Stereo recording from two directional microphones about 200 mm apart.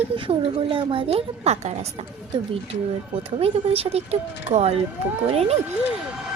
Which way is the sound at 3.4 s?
30° right (ahead or behind).